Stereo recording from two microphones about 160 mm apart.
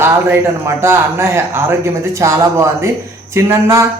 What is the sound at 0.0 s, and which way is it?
A man's voice, 15° right (ahead or behind).